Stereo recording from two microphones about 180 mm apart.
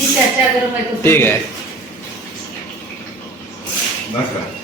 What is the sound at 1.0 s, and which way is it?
Speech, 10° left (ahead or behind).